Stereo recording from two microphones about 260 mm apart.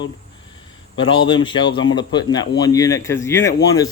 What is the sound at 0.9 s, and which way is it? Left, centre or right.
Speech, centre.